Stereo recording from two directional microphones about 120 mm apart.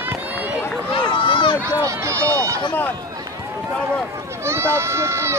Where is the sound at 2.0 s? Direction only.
25° right (ahead or behind).